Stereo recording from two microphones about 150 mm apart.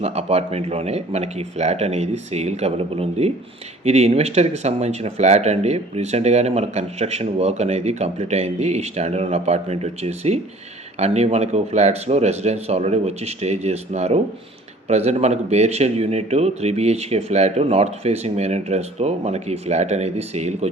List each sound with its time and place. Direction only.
0.0 s speech: 45° right (ahead or behind)